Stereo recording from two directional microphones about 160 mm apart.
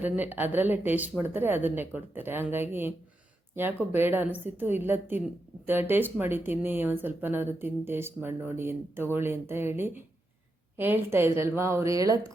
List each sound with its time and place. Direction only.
0.0 s speech: 10° right (ahead or behind)